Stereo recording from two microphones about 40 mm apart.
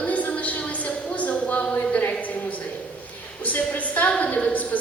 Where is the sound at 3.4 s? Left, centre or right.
Left.